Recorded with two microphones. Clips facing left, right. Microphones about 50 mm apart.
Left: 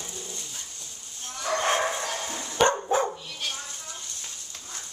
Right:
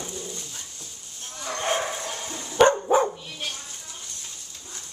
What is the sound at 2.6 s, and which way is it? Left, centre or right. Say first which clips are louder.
Dog: right 5 dB; centre.